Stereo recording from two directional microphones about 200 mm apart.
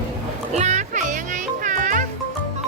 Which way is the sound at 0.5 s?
35° right (ahead or behind).